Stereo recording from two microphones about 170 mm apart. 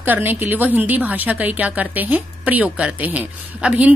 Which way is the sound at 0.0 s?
10° right (ahead or behind).